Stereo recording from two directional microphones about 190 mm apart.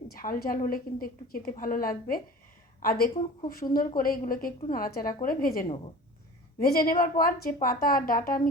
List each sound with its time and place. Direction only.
0.1 s a woman's voice: 50° left (ahead or behind)